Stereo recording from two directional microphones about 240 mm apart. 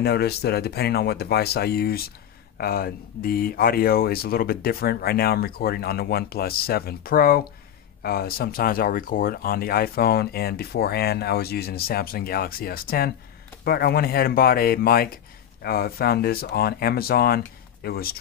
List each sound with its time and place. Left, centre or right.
0.0 s speech: left